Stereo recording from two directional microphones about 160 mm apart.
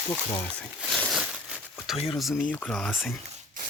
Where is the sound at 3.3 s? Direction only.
55° right (ahead or behind).